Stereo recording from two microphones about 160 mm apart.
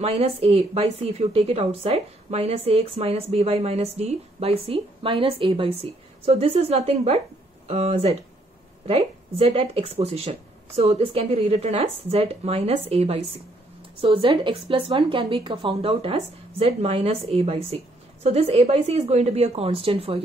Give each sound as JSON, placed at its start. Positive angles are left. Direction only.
{"t": 0.0, "sound": "a woman's voice", "side_deg": -40}